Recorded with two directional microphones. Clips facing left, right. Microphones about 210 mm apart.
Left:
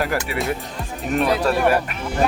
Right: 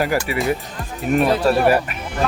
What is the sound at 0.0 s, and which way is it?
Speech, centre (ahead or behind).